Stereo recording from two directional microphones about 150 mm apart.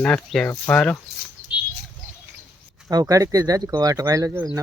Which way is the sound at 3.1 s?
20° right (ahead or behind).